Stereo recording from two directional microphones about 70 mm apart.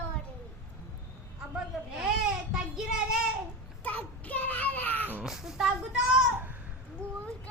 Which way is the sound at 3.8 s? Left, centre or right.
Left.